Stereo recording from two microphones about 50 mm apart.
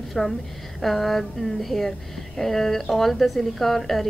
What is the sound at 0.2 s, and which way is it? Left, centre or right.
A woman's voice, centre.